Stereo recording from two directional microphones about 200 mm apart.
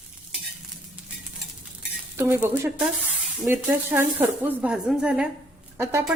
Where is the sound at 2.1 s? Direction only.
10° right (ahead or behind).